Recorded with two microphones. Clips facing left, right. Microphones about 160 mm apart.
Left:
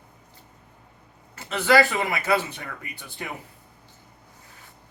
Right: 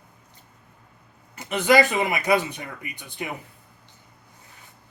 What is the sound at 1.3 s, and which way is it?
Speech, 15° right (ahead or behind).